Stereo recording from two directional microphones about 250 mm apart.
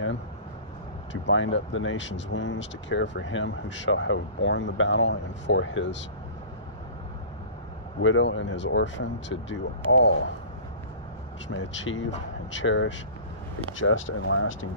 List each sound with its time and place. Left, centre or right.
1.1 s speech: left
8.0 s speech: left
11.4 s speech: left